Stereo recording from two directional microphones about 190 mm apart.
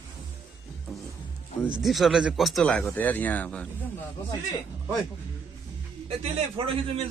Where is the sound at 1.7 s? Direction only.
Centre (ahead or behind).